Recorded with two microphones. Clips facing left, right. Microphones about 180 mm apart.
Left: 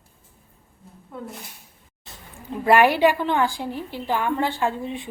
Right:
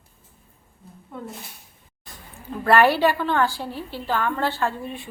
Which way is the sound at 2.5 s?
15° left (ahead or behind).